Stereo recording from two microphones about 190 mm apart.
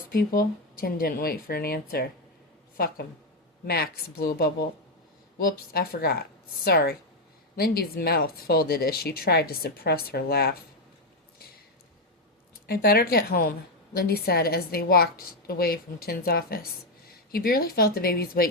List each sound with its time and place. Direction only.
0.1 s a woman's voice: 50° left (ahead or behind)
12.6 s speech: 55° left (ahead or behind)